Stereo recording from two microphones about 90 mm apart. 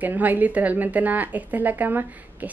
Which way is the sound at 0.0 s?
20° right (ahead or behind).